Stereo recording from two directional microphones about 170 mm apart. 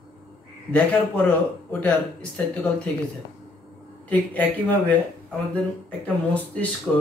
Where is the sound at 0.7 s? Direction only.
10° left (ahead or behind).